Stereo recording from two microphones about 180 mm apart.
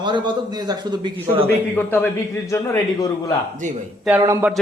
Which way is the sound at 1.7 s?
10° left (ahead or behind).